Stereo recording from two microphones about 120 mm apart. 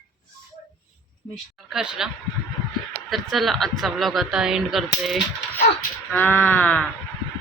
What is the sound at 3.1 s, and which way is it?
A woman's voice, centre (ahead or behind).